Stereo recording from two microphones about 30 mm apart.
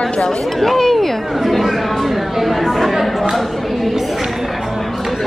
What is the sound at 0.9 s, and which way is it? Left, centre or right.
Chatter, centre.